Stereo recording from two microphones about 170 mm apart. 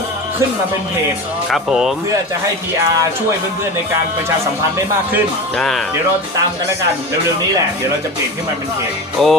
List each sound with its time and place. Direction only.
1.5 s speech: centre (ahead or behind)
5.5 s speech: centre (ahead or behind)
9.2 s speech: centre (ahead or behind)